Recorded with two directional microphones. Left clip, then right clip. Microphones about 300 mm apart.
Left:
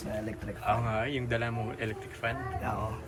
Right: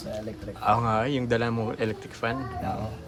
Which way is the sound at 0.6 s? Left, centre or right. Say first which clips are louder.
Right 7 dB; centre.